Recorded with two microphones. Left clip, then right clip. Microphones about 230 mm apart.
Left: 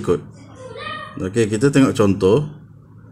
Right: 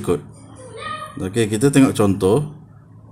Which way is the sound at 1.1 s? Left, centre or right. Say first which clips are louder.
Left 2 dB; centre.